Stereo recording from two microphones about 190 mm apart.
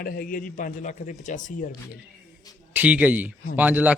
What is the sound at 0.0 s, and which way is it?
Speech, 50° left (ahead or behind).